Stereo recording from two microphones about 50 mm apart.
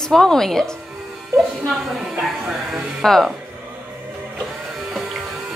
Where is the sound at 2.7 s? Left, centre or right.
Centre.